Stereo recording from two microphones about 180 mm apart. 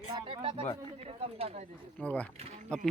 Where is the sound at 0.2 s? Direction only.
30° right (ahead or behind).